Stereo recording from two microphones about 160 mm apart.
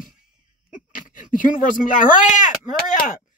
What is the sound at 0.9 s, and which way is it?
Speech, 60° left (ahead or behind).